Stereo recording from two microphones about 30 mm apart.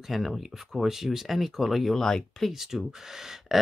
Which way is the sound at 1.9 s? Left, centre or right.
Centre.